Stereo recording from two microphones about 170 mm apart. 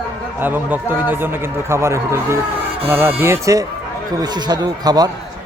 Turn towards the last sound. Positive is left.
turn(degrees=-25)  # may be behind; listen again after turning